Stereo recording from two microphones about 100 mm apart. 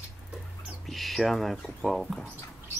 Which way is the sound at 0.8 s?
Centre (ahead or behind).